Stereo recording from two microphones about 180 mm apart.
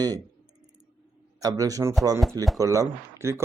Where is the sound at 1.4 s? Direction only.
20° right (ahead or behind).